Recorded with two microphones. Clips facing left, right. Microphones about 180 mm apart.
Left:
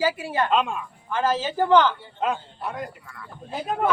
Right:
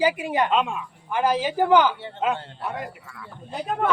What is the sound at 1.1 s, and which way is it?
A man's voice, 15° right (ahead or behind).